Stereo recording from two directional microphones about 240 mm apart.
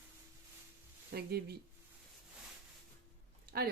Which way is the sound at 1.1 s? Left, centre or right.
Right.